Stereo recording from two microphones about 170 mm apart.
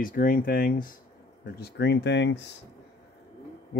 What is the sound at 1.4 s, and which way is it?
Speech, 80° left.